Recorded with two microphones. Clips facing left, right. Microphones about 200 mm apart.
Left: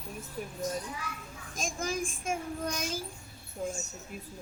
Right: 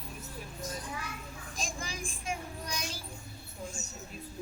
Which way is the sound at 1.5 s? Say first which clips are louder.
Left 7 dB; 45° left (ahead or behind).